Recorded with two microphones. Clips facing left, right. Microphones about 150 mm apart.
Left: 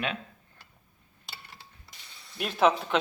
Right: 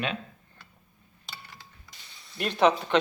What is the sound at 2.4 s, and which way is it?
Speech, 5° left (ahead or behind).